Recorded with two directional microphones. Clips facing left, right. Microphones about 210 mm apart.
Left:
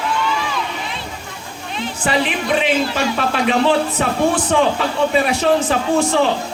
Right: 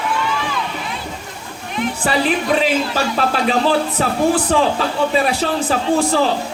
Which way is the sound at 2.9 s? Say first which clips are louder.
Right 1 dB; 35° right (ahead or behind).